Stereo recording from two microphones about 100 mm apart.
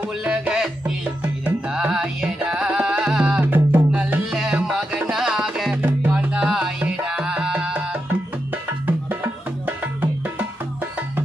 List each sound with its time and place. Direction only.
0.2 s music: 10° right (ahead or behind)
5.8 s music: 15° right (ahead or behind)
6.3 s music: 5° right (ahead or behind)